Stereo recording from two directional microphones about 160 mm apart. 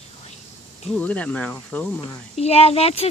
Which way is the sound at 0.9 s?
10° left (ahead or behind).